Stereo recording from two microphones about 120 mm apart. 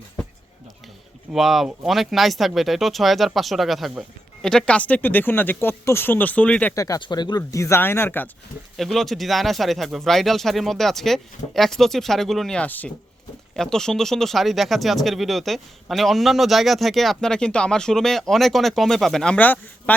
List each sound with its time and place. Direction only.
1.3 s speech: centre (ahead or behind)
6.7 s speech: 30° left (ahead or behind)
8.7 s speech: centre (ahead or behind)